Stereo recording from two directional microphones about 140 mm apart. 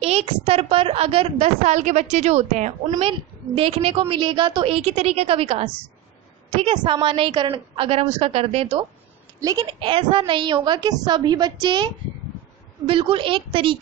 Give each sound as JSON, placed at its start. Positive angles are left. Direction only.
{"t": 0.0, "sound": "a woman's voice", "side_deg": -45}
{"t": 3.0, "sound": "a woman's voice", "side_deg": -40}
{"t": 9.4, "sound": "a woman's voice", "side_deg": -25}